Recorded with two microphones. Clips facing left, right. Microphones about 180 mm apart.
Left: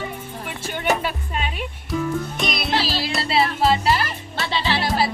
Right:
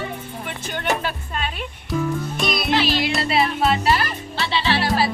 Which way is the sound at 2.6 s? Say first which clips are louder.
Right 4 dB; 30° left (ahead or behind).